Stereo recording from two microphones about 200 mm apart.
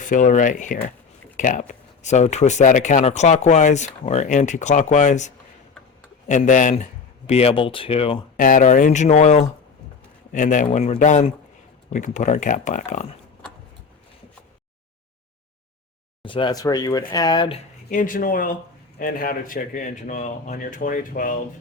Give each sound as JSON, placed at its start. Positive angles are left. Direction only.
{"t": 0.0, "sound": "speech", "side_deg": 40}
{"t": 8.4, "sound": "speech", "side_deg": 40}
{"t": 16.2, "sound": "speech", "side_deg": 25}
{"t": 17.9, "sound": "speech", "side_deg": 45}